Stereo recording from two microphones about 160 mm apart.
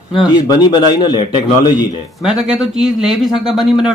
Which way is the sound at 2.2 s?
5° right (ahead or behind).